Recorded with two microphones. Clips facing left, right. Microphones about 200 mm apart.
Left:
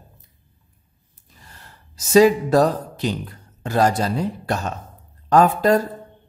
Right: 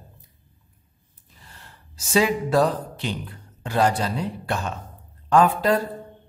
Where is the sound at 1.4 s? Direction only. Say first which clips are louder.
Left 1 dB; 40° left (ahead or behind).